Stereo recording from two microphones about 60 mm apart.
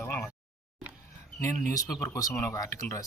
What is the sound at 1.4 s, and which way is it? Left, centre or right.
Speech, left.